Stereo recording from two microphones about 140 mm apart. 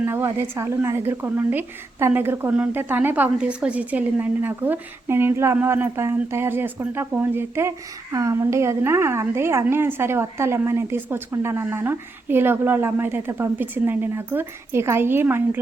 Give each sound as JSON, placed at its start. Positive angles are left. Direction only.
{"t": 0.0, "sound": "a woman's voice", "side_deg": -15}